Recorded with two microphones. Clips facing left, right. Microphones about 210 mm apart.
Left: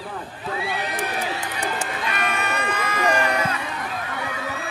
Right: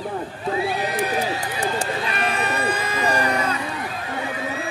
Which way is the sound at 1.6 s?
35° right (ahead or behind).